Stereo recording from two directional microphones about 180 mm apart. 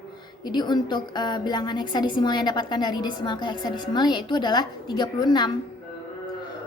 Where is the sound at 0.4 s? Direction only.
25° left (ahead or behind).